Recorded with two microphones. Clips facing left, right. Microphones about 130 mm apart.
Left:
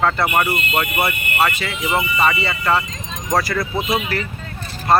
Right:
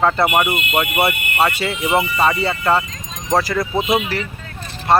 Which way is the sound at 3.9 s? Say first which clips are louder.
Right 2 dB; 5° right (ahead or behind).